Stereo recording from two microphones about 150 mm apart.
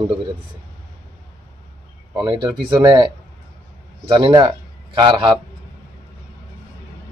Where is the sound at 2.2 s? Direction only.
30° right (ahead or behind).